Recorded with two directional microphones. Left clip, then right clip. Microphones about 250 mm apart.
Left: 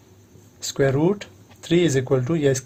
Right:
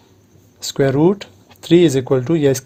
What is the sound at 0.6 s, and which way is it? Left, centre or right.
Speech, right.